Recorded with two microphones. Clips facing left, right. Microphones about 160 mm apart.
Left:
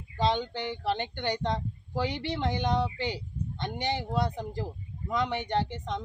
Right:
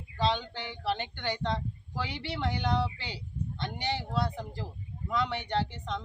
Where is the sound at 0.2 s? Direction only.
20° left (ahead or behind).